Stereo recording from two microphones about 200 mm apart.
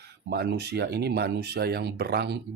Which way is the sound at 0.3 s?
55° right (ahead or behind).